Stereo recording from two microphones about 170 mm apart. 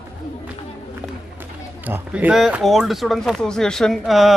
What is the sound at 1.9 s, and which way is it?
Speech, 10° right (ahead or behind).